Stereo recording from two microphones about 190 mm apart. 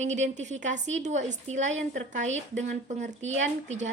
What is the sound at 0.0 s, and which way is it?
Speech, 40° right (ahead or behind).